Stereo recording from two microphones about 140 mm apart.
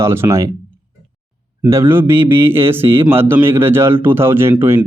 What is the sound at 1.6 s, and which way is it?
Speech, 20° right (ahead or behind).